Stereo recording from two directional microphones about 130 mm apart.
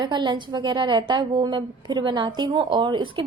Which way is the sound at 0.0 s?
35° right (ahead or behind).